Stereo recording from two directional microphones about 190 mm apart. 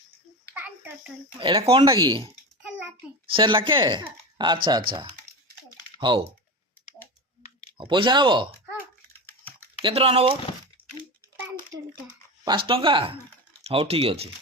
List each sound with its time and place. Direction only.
0.5 s a sound: 5° right (ahead or behind)
1.4 s speech: 25° right (ahead or behind)
6.0 s speech: 25° right (ahead or behind)
7.8 s speech: 25° right (ahead or behind)
9.8 s speech: 30° right (ahead or behind)
12.5 s speech: 25° right (ahead or behind)